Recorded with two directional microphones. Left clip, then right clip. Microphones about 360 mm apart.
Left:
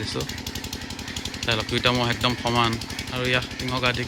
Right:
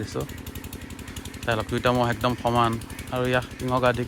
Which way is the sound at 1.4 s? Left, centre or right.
Centre.